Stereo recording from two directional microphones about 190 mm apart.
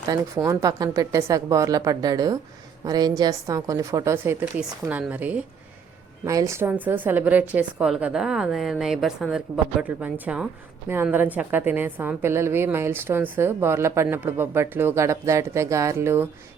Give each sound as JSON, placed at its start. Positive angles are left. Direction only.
{"t": 0.1, "sound": "a woman's voice", "side_deg": -20}